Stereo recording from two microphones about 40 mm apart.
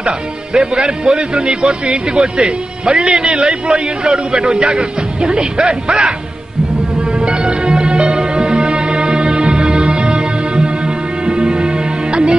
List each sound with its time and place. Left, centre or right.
0.0 s speech: right
7.2 s music: right